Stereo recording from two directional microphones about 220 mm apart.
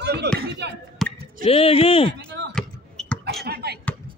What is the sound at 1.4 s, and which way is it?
Speech, 25° left (ahead or behind).